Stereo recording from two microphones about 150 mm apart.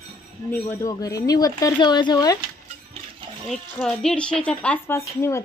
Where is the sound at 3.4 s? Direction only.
5° left (ahead or behind).